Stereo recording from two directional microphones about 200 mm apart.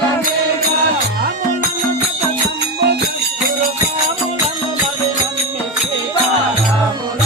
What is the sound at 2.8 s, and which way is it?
Music, 55° right (ahead or behind).